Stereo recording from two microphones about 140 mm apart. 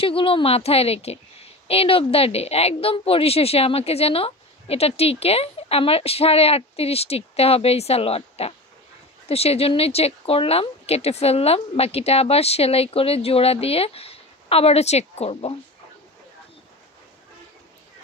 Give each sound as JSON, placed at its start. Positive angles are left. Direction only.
{"t": 0.0, "sound": "a woman's voice", "side_deg": 40}